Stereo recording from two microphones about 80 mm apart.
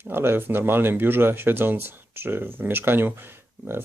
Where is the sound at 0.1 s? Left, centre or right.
Right.